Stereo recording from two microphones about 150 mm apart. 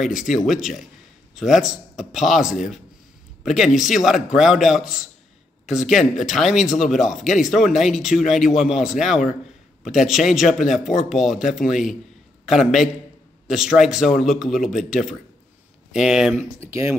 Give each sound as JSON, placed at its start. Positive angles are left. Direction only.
{"t": 0.0, "sound": "speech", "side_deg": 0}
{"t": 16.5, "sound": "speech", "side_deg": -20}